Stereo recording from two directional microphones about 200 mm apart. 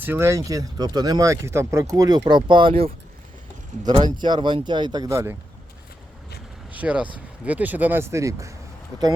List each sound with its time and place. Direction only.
0.0 s speech: 10° right (ahead or behind)
6.7 s speech: 5° right (ahead or behind)